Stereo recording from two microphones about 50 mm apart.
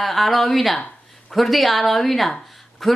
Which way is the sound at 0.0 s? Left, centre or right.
Centre.